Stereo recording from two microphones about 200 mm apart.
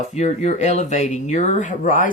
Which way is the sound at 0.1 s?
35° left (ahead or behind).